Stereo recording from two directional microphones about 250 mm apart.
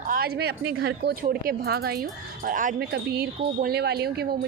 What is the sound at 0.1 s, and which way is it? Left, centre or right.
Speech, right.